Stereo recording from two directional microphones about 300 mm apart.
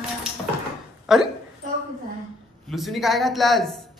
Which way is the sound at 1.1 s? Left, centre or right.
Centre.